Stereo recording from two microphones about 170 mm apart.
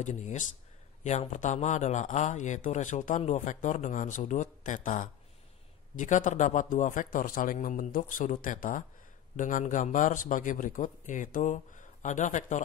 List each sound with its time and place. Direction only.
0.0 s a man's voice: 45° left (ahead or behind)